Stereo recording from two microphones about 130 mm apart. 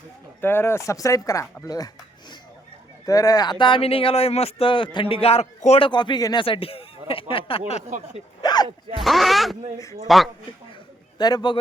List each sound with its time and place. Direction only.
0.4 s speech: 20° left (ahead or behind)
3.1 s speech: 25° left (ahead or behind)
3.6 s speech: 45° left (ahead or behind)
5.9 s speech: 35° left (ahead or behind)
6.4 s speech: 45° left (ahead or behind)
7.9 s speech: 70° right (ahead or behind)
8.4 s a sound: 30° left (ahead or behind)
9.0 s speech: centre (ahead or behind)
11.2 s speech: 30° left (ahead or behind)